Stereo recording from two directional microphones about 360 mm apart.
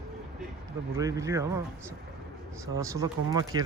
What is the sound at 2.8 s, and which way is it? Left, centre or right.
Speech, centre.